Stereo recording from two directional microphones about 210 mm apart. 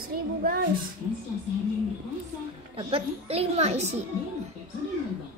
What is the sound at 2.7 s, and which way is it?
A woman's voice, 30° right (ahead or behind).